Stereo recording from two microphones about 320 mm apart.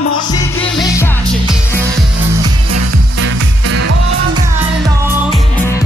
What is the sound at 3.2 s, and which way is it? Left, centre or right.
Music, right.